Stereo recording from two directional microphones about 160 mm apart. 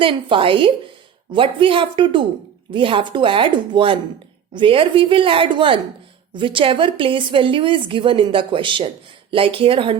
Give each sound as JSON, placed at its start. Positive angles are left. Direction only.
{"t": 0.0, "sound": "a woman's voice", "side_deg": -35}